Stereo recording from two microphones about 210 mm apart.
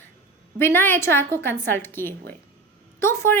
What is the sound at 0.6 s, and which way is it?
A woman's voice, 10° left (ahead or behind).